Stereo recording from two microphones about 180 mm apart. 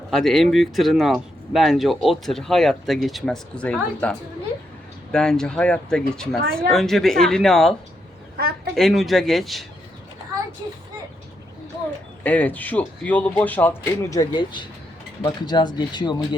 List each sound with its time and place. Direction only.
0.1 s speech: centre (ahead or behind)
12.2 s speech: 10° left (ahead or behind); by 16.2 s 25° left (ahead or behind)